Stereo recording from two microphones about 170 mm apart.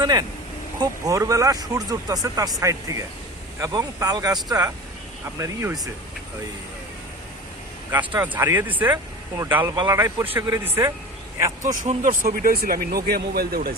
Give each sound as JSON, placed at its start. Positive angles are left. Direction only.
{"t": 0.0, "sound": "speech", "side_deg": -25}
{"t": 7.9, "sound": "speech", "side_deg": -10}
{"t": 11.8, "sound": "speech", "side_deg": -50}